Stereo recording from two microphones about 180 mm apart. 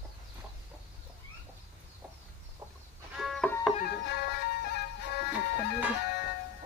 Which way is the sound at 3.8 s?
65° left (ahead or behind).